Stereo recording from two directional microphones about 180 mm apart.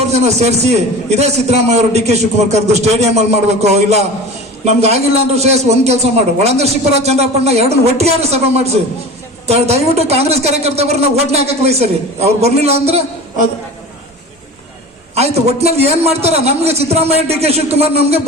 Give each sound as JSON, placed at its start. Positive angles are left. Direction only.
{"t": 0.0, "sound": "a man's voice", "side_deg": -35}
{"t": 15.1, "sound": "a man's voice", "side_deg": -35}